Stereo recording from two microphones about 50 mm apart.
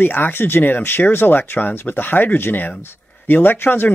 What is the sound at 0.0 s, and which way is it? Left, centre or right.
Speech, left.